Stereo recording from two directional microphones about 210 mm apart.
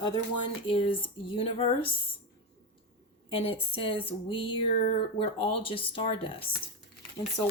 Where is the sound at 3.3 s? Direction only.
25° left (ahead or behind).